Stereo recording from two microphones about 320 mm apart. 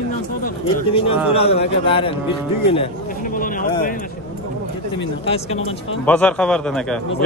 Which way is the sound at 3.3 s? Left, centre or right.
Left.